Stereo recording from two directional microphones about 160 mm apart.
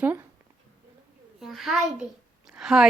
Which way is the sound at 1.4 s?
Centre (ahead or behind).